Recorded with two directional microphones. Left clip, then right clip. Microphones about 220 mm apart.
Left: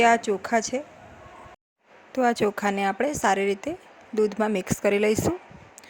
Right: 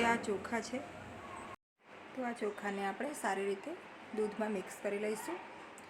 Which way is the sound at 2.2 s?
45° left (ahead or behind).